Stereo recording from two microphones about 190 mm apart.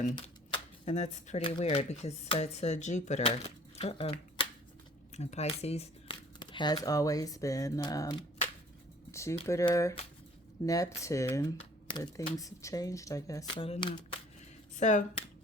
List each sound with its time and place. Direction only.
0.2 s speech: 30° left (ahead or behind)
9.5 s speech: 15° left (ahead or behind)
14.8 s speech: 40° left (ahead or behind)